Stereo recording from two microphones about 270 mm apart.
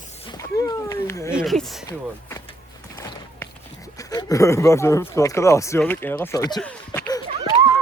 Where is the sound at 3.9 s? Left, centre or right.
Centre.